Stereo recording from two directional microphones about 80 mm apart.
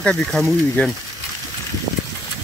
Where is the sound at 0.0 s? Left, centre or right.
Centre.